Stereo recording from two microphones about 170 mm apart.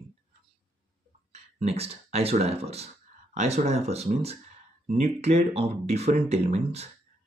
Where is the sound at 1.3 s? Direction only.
40° right (ahead or behind).